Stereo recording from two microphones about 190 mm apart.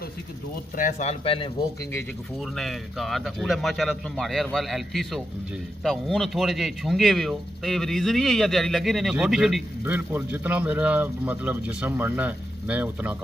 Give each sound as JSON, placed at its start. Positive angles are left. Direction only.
{"t": 0.7, "sound": "speech", "side_deg": 40}
{"t": 2.5, "sound": "speech", "side_deg": 0}